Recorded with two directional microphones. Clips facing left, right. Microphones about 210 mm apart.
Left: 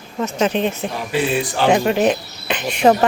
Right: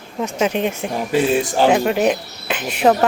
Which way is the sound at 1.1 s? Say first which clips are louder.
Right 3 dB; 45° right (ahead or behind).